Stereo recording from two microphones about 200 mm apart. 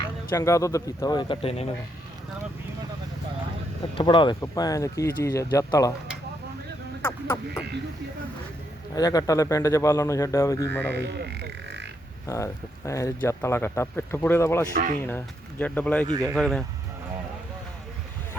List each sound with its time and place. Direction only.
0.0 s speech: 15° left (ahead or behind)
3.9 s speech: 25° left (ahead or behind)
9.0 s speech: 20° left (ahead or behind)
10.9 s speech: 60° right (ahead or behind)
12.2 s speech: 15° left (ahead or behind)
14.7 s speech: 45° right (ahead or behind)
15.0 s speech: 10° left (ahead or behind)